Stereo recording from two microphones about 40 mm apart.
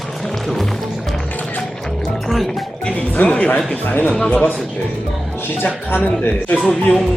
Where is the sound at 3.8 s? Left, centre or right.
Left.